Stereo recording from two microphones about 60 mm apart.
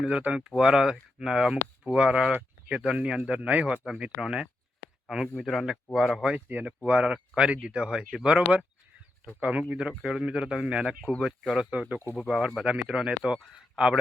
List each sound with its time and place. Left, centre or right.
0.0 s speech: centre
3.8 s speech: centre
5.0 s speech: centre
6.5 s speech: right
6.8 s speech: centre
11.7 s speech: right
12.9 s speech: centre